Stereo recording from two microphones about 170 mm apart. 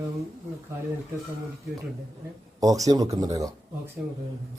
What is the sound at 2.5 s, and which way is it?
A man's voice, 20° right (ahead or behind).